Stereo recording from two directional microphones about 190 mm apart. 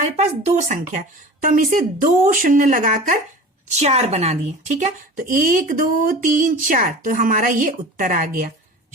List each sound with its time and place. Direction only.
0.0 s speech: 35° right (ahead or behind)
3.7 s speech: 35° right (ahead or behind)